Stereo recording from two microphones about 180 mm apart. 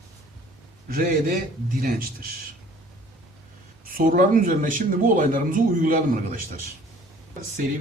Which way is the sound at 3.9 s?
50° right (ahead or behind).